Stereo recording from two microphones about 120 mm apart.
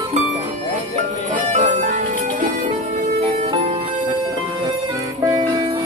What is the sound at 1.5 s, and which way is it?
Music, 85° right.